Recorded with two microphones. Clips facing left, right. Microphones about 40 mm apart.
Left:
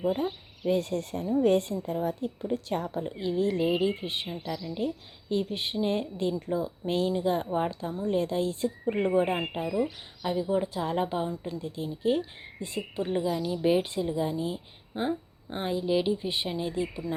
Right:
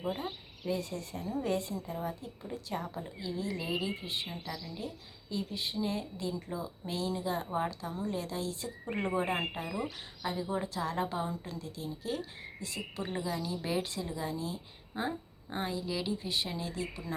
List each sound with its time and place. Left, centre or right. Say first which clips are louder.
0.0 s a sound: left 8 dB; centre
0.7 s a woman's voice: left 8 dB; left
3.1 s a woman's voice: left 11 dB; left
4.3 s a woman's voice: left 6 dB; centre
5.3 s a woman's voice: left 7 dB; left
8.8 s speech: left 7 dB; centre
10.8 s speech: left 5 dB; left
11.3 s a woman's voice: left 5 dB; centre
11.6 s a woman's voice: left 10 dB; left
12.8 s a woman's voice: left 8 dB; centre
13.3 s speech: left 9 dB; centre